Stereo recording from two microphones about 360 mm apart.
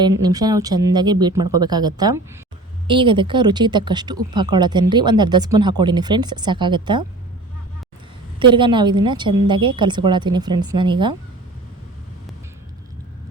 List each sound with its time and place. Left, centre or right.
0.2 s a woman's voice: centre
1.4 s speech: right
1.6 s a woman's voice: centre
8.4 s a woman's voice: centre